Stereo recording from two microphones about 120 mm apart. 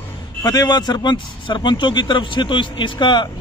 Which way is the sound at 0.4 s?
35° left (ahead or behind).